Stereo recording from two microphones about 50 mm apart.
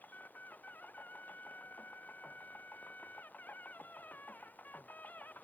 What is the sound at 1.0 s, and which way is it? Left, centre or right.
Music, left.